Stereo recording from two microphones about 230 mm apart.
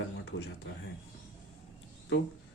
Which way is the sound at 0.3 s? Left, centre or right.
Left.